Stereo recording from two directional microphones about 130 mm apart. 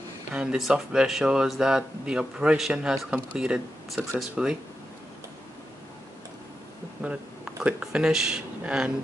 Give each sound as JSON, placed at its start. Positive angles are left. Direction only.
{"t": 0.3, "sound": "speech", "side_deg": -5}
{"t": 7.0, "sound": "a sound", "side_deg": -10}
{"t": 7.6, "sound": "speech", "side_deg": -5}